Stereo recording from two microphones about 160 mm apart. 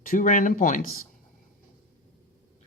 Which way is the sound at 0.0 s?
55° left (ahead or behind).